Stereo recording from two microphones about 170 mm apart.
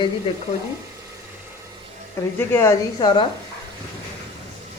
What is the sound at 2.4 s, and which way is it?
Speech, 15° left (ahead or behind).